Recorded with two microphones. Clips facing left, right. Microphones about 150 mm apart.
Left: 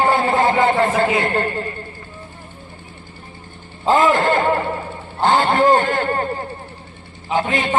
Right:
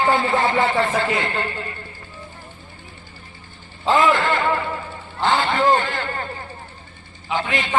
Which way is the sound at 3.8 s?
45° left (ahead or behind).